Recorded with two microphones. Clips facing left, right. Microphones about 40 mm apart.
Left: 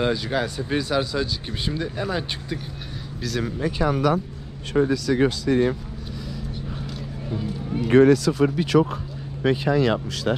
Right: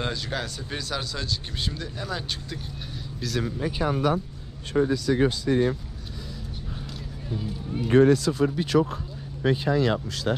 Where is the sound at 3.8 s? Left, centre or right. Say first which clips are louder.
Left 3 dB; left.